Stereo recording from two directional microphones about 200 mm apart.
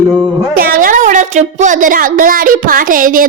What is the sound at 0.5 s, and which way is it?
A woman's voice, 45° right (ahead or behind).